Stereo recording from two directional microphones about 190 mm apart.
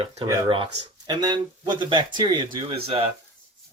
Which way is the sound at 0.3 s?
25° right (ahead or behind).